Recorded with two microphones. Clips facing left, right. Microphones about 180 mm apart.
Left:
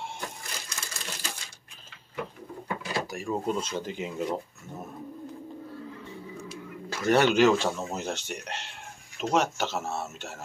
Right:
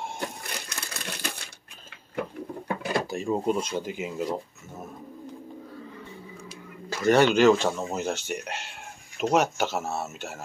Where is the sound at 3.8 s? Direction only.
10° right (ahead or behind).